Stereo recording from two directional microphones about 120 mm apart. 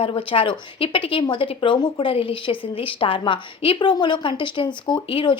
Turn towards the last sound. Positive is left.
turn(degrees=40)  # may be behind; listen again after turning